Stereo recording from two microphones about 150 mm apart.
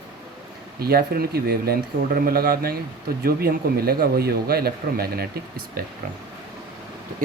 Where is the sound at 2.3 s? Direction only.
75° right (ahead or behind).